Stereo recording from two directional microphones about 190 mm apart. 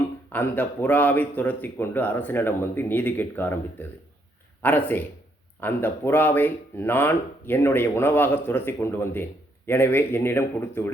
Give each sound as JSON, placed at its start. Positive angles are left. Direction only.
{"t": 0.3, "sound": "speech", "side_deg": 10}